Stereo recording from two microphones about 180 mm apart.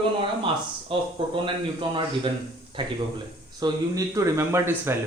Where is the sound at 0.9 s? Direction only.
30° right (ahead or behind).